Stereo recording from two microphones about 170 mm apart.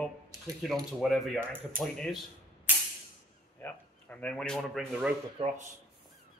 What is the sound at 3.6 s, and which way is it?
Speech, 10° left (ahead or behind).